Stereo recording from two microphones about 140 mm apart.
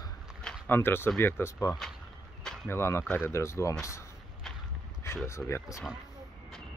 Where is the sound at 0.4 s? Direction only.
5° left (ahead or behind).